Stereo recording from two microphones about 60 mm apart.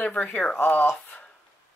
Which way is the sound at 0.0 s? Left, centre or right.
Centre.